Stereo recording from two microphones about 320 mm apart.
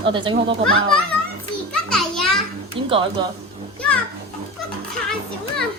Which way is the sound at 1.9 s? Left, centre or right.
Centre.